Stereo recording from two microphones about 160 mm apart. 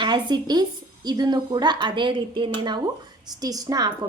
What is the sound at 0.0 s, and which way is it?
A woman's voice, 30° right (ahead or behind).